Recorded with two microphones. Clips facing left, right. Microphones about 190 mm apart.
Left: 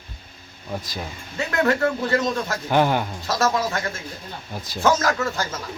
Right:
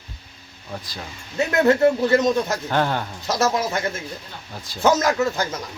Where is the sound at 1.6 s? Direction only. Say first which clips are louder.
Right 5 dB; 20° right (ahead or behind).